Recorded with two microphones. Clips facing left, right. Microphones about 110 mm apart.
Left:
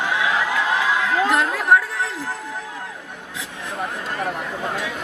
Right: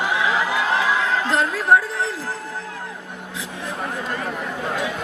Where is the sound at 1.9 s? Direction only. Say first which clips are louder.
Right 1 dB; 20° right (ahead or behind).